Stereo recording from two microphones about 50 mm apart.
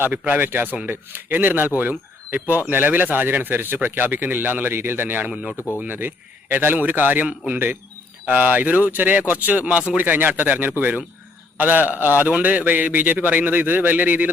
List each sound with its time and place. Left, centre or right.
0.1 s speech: right